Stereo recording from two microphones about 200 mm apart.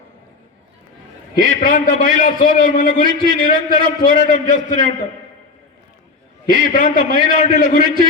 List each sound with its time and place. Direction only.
1.4 s a man's voice: 45° left (ahead or behind)
6.4 s a man's voice: 45° left (ahead or behind)